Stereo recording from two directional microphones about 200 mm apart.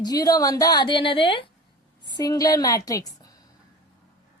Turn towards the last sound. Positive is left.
turn(degrees=20)  # may be behind; listen again after turning